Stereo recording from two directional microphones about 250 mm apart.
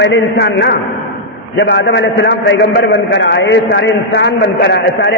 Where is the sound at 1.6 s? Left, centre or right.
Left.